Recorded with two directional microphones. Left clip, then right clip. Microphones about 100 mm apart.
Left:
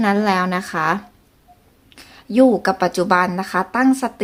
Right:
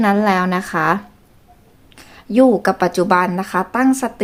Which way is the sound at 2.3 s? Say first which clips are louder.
Right 1 dB; 20° right (ahead or behind).